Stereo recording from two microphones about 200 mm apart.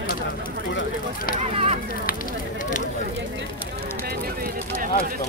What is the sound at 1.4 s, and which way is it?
Speech, 30° right (ahead or behind).